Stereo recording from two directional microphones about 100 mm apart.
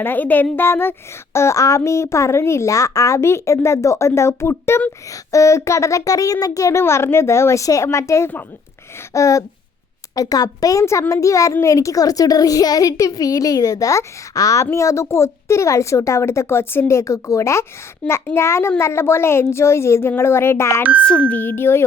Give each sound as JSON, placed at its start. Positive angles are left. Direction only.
{"t": 0.0, "sound": "a woman's voice", "side_deg": 20}
{"t": 18.0, "sound": "a child's voice", "side_deg": 10}
{"t": 18.3, "sound": "speech", "side_deg": 25}
{"t": 21.0, "sound": "speech", "side_deg": 10}